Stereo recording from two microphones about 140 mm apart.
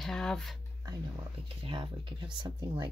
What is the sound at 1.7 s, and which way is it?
Speech, 35° right (ahead or behind).